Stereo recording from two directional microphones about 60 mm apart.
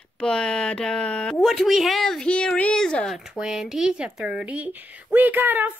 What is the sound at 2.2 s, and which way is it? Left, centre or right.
Speech, centre.